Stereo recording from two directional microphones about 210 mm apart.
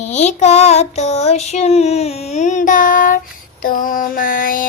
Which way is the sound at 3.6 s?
40° left (ahead or behind).